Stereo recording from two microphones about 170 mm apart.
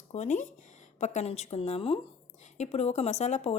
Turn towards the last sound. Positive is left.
turn(degrees=40)  # may be behind; listen again after turning